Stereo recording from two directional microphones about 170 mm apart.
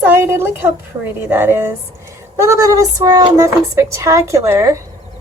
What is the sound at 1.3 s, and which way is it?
A woman's voice, 15° right (ahead or behind).